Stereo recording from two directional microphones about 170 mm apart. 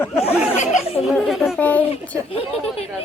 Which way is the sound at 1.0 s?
Centre (ahead or behind).